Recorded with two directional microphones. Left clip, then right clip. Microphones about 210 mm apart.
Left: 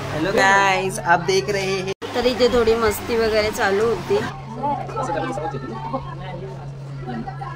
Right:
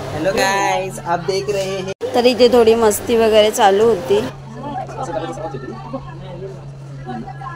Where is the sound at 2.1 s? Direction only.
30° right (ahead or behind).